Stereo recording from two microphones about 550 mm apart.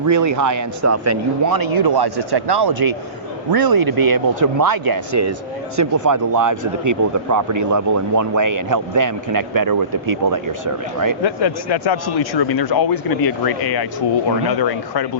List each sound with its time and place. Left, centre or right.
0.0 s speech: right
11.2 s speech: left